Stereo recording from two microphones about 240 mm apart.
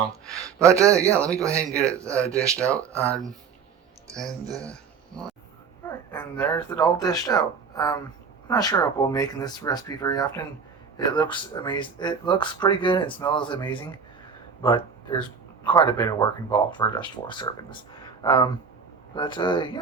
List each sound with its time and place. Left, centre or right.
0.6 s a man's voice: centre
1.1 s speech: centre
1.4 s a man's voice: centre
2.6 s speech: centre
4.1 s speech: centre
4.6 s a sound: centre
6.6 s speech: centre